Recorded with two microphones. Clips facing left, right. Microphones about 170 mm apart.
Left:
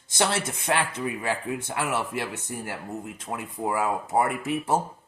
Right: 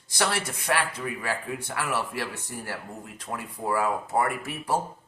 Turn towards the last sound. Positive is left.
turn(degrees=20)  # may be behind; listen again after turning